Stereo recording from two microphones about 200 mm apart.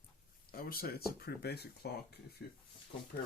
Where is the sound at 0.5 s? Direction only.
50° left (ahead or behind).